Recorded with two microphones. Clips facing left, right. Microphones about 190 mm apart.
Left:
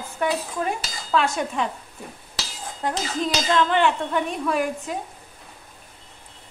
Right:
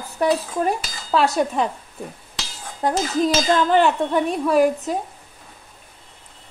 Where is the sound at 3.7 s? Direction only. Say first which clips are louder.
Right 4 dB; 40° right (ahead or behind).